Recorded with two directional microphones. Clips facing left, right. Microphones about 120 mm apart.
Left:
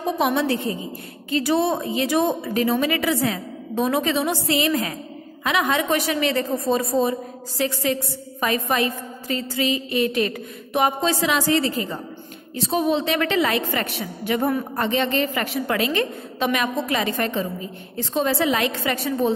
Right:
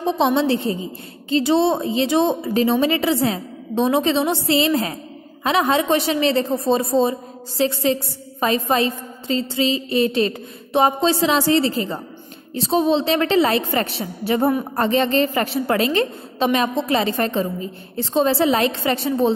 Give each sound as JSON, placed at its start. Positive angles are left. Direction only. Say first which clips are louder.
{"t": 0.0, "sound": "a woman's voice", "louder": "right 3 dB", "side_deg": -25}